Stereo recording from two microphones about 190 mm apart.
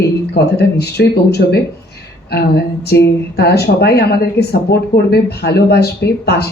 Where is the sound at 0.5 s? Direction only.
60° left (ahead or behind).